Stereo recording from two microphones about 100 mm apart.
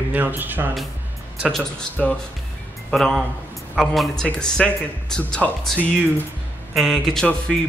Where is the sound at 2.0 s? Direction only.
10° left (ahead or behind).